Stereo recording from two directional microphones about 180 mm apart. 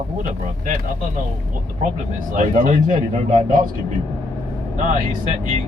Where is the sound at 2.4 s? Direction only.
45° right (ahead or behind).